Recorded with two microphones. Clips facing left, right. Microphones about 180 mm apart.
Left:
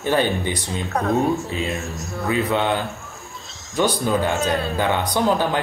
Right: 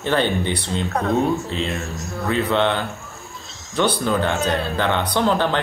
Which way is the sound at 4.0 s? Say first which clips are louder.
Even; 15° left (ahead or behind).